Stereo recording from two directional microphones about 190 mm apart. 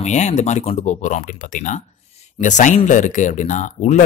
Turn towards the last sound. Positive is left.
turn(degrees=40)  # may be behind; listen again after turning